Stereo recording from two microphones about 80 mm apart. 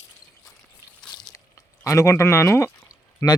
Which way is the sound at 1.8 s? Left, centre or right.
Left.